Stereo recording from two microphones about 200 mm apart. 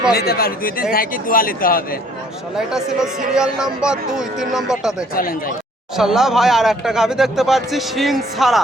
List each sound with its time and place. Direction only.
0.1 s a man's voice: 50° left (ahead or behind)
3.3 s speech: 5° right (ahead or behind)
5.1 s a man's voice: 45° left (ahead or behind)
6.0 s speech: centre (ahead or behind)